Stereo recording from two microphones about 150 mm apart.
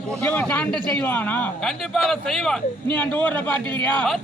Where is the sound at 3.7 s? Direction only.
35° right (ahead or behind).